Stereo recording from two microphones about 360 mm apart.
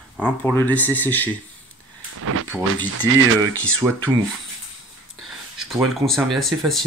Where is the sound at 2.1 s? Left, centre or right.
Right.